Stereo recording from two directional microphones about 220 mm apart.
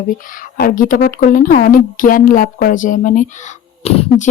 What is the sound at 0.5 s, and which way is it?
Speech, 40° left (ahead or behind).